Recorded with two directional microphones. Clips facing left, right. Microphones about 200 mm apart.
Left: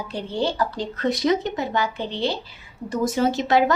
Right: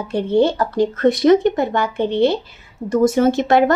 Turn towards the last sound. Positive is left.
turn(degrees=-55)  # may be behind; listen again after turning